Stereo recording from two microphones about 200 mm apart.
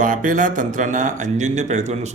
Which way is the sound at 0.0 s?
40° right (ahead or behind).